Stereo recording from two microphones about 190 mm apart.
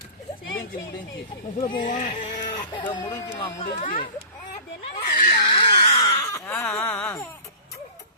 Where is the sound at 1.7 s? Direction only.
40° left (ahead or behind).